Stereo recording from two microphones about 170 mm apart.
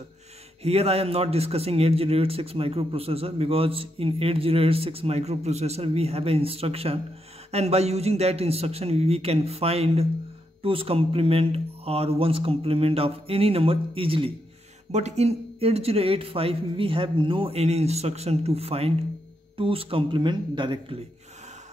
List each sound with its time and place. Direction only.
0.6 s a man's voice: 35° right (ahead or behind)